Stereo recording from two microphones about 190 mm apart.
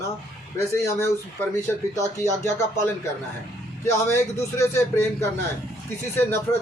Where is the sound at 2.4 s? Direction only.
15° left (ahead or behind).